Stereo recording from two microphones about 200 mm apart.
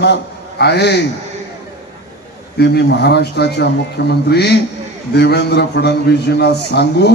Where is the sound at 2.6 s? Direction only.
55° left (ahead or behind).